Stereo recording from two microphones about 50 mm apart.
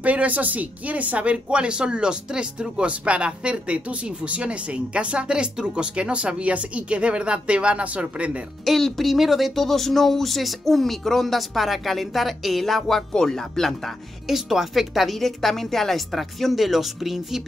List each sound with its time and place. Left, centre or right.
0.0 s speech: right
8.6 s speech: centre
14.2 s speech: centre